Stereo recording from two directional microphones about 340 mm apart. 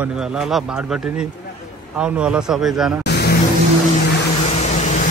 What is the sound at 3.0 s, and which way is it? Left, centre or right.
Vehicle, left.